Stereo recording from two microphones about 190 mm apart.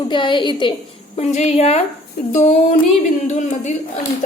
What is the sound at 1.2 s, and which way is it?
A woman's voice, 35° left (ahead or behind).